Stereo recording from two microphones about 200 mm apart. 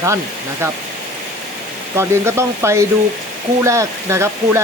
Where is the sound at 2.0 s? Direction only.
15° right (ahead or behind).